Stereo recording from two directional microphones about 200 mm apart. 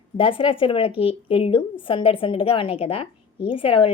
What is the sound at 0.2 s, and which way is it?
A woman's voice, 25° left (ahead or behind).